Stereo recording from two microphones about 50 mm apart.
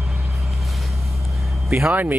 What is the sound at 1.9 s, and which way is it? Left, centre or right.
Speech, right.